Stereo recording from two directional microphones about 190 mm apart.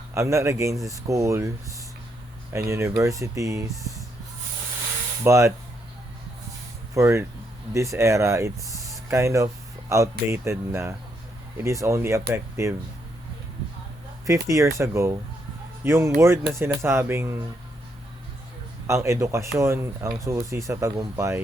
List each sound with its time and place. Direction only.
0.1 s speech: 15° right (ahead or behind)
2.5 s speech: 15° right (ahead or behind)
5.2 s speech: 15° right (ahead or behind)
6.9 s speech: 15° right (ahead or behind)
14.4 s speech: 15° right (ahead or behind)
18.9 s speech: 15° right (ahead or behind)